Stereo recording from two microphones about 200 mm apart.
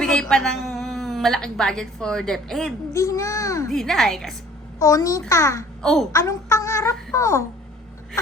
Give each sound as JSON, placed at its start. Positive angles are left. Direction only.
{"t": 0.0, "sound": "a woman's voice", "side_deg": 5}
{"t": 2.9, "sound": "a child's voice", "side_deg": 15}
{"t": 3.7, "sound": "a woman's voice", "side_deg": 0}
{"t": 4.8, "sound": "a child's voice", "side_deg": 15}
{"t": 5.8, "sound": "a woman's voice", "side_deg": 0}
{"t": 6.1, "sound": "a child's voice", "side_deg": 15}